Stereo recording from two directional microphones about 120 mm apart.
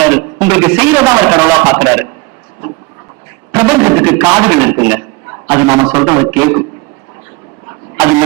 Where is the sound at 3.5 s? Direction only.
20° right (ahead or behind).